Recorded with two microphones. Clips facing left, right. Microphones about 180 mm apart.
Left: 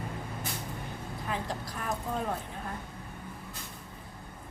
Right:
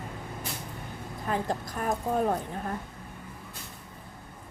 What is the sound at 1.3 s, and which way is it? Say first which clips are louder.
A woman's voice: right 6 dB; 45° right (ahead or behind).